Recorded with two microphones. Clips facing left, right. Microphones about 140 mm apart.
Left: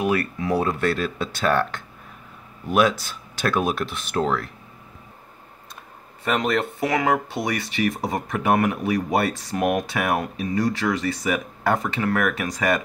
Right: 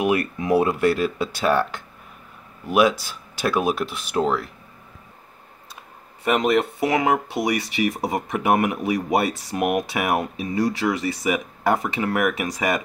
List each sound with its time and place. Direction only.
0.0 s speech: 20° right (ahead or behind)
6.2 s speech: 15° right (ahead or behind)